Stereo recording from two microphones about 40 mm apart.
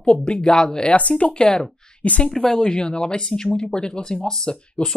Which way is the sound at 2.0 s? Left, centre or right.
Left.